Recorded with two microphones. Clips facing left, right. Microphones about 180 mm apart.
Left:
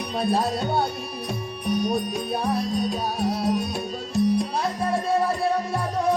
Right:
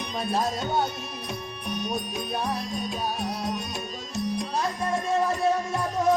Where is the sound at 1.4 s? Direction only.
10° left (ahead or behind).